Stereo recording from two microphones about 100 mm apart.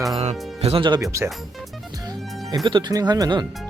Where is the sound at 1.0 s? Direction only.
30° right (ahead or behind).